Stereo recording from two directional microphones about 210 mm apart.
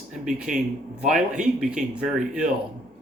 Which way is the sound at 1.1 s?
5° right (ahead or behind).